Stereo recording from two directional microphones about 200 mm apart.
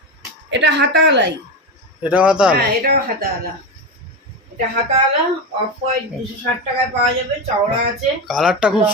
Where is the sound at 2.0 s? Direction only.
5° right (ahead or behind).